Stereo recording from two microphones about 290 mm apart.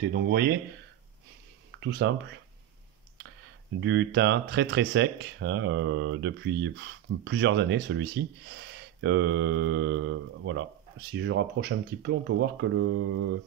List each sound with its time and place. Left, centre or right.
0.0 s speech: right
1.8 s speech: right
3.8 s speech: right